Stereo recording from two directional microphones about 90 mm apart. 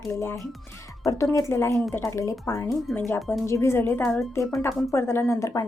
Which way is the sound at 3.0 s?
20° left (ahead or behind).